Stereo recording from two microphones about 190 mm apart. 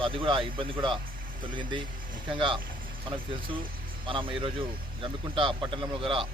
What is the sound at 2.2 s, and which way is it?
Speech, 25° right (ahead or behind).